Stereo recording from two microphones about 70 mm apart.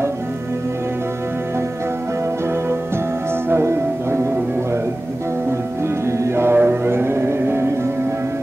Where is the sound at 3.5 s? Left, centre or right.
Right.